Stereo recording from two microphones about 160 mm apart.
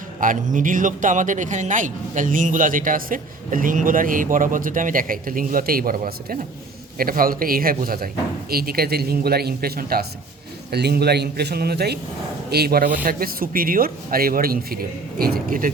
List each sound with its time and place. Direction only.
0.2 s speech: 55° right (ahead or behind); by 10.1 s 75° right (ahead or behind)
10.7 s a man's voice: 90° right; by 15.7 s 60° right (ahead or behind)